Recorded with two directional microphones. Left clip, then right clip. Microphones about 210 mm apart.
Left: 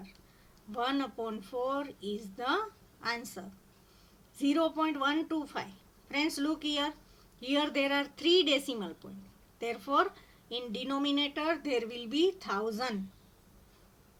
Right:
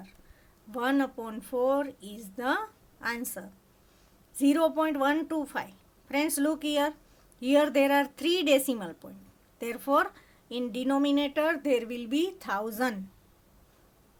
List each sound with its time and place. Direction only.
0.7 s speech: 50° right (ahead or behind)